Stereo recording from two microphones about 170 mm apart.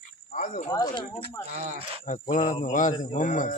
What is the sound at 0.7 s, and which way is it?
Speech, 25° left (ahead or behind).